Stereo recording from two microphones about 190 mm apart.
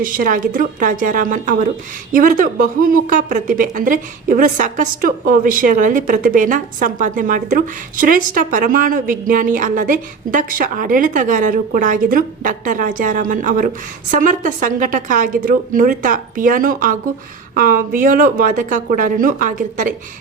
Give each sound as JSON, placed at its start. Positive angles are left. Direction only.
{"t": 0.0, "sound": "a woman's voice", "side_deg": -45}